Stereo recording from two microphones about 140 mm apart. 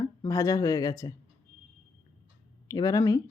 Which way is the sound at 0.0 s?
25° left (ahead or behind).